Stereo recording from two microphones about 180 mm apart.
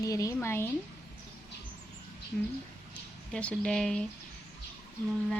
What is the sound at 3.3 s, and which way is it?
Speech, 5° left (ahead or behind).